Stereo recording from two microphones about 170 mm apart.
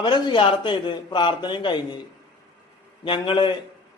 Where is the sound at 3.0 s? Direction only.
30° left (ahead or behind).